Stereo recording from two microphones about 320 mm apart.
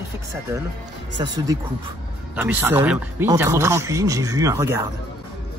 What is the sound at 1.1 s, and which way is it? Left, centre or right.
Speech, centre.